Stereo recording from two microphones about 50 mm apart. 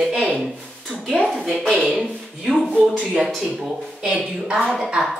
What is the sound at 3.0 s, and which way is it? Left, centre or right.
Speech, right.